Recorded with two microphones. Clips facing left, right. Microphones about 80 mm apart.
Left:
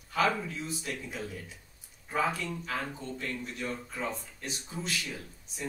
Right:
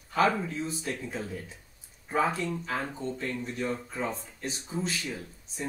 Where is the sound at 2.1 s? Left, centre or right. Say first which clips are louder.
Right 3 dB; right.